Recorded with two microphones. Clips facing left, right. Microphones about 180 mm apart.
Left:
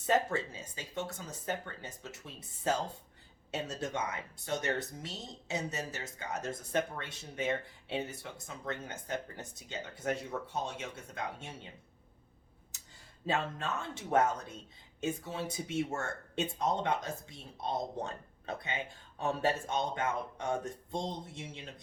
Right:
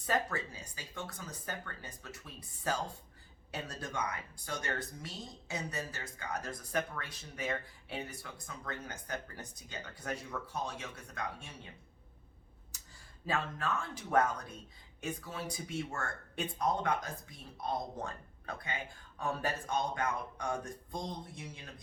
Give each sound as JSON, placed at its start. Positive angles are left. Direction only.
{"t": 0.0, "sound": "speech", "side_deg": 25}
{"t": 13.2, "sound": "speech", "side_deg": 25}